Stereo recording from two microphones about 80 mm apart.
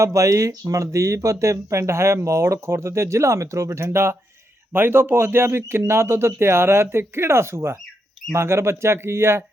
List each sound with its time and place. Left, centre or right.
0.0 s speech: right